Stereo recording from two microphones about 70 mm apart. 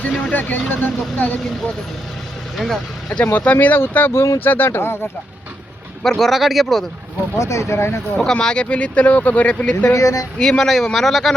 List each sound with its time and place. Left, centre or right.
0.0 s speech: centre
2.6 s speech: centre
3.3 s speech: left
4.4 s speech: left
6.0 s speech: centre
7.3 s speech: left
8.1 s speech: centre
9.9 s speech: left
10.3 s speech: centre